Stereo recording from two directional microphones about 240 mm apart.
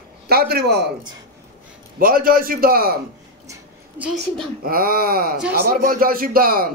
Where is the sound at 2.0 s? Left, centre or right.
Right.